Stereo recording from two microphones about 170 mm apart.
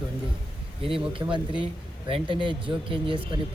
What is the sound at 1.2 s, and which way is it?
Speech, 15° right (ahead or behind).